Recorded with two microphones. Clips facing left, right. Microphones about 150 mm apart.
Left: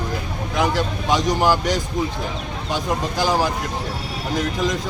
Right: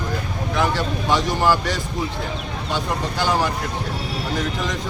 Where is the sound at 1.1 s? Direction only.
15° left (ahead or behind).